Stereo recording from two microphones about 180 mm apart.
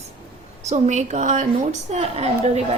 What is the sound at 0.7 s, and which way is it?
A woman's voice, 40° right (ahead or behind).